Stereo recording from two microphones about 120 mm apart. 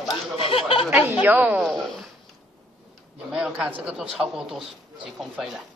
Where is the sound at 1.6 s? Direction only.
5° left (ahead or behind).